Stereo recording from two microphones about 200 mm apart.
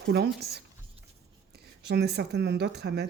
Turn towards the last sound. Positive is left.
turn(degrees=-55)  # may be behind; listen again after turning